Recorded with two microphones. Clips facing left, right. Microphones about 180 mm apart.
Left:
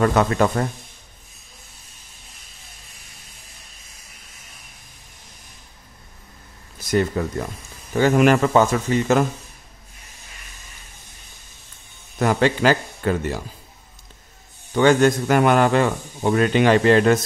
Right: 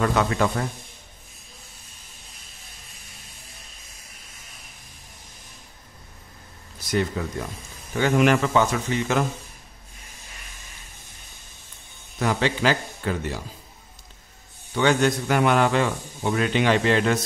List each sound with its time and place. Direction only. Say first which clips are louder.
0.0 s a man's voice: left 4 dB; 45° left (ahead or behind)
7.2 s a man's voice: left 5 dB; 45° left (ahead or behind)
12.2 s a man's voice: left 5 dB; 50° left (ahead or behind)
14.7 s a man's voice: left 5 dB; 45° left (ahead or behind)